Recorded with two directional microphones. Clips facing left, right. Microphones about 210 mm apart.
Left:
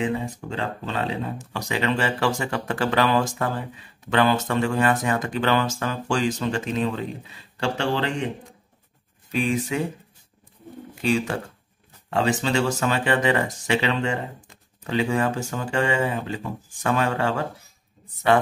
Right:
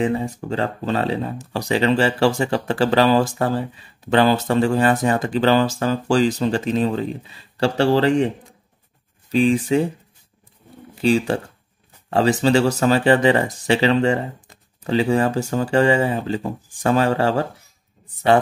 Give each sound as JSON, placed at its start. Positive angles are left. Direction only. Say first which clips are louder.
{"t": 0.0, "sound": "speech", "louder": "right 5 dB", "side_deg": -40}
{"t": 9.3, "sound": "speech", "louder": "right 7 dB", "side_deg": -30}
{"t": 11.0, "sound": "speech", "louder": "right 5 dB", "side_deg": -30}